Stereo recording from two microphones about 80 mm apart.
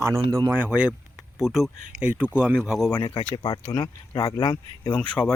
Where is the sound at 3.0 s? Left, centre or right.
Left.